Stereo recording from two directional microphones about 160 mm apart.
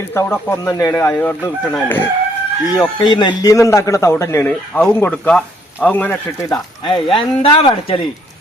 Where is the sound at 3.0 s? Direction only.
30° left (ahead or behind); by 6.2 s 10° left (ahead or behind).